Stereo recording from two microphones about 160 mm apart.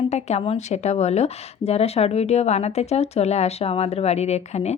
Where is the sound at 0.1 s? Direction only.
45° left (ahead or behind).